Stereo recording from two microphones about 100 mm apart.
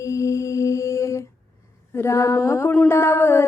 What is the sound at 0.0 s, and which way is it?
Mantra, 30° left (ahead or behind).